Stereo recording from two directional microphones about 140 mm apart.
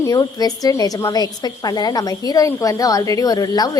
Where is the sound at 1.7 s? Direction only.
30° left (ahead or behind).